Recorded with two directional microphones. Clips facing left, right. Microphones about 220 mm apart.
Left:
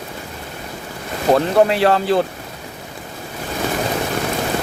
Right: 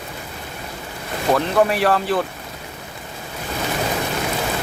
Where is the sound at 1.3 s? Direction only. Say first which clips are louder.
Left 3 dB; 30° left (ahead or behind).